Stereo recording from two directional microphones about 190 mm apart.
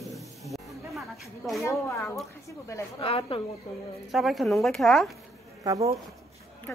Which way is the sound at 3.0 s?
30° left (ahead or behind).